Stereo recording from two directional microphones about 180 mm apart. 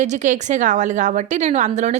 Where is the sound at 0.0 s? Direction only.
40° right (ahead or behind).